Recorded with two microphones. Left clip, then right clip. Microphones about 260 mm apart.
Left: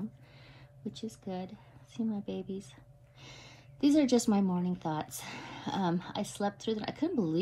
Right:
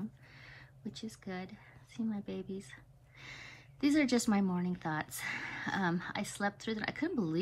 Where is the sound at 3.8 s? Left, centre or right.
Centre.